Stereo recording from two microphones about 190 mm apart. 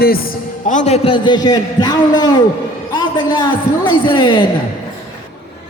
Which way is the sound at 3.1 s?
25° left (ahead or behind).